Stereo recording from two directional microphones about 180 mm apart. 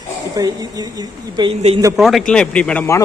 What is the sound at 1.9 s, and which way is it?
A man's voice, centre (ahead or behind).